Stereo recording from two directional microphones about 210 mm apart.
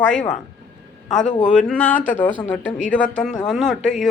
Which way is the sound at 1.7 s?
5° left (ahead or behind).